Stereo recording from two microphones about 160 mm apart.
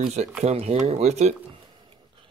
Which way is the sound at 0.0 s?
40° right (ahead or behind).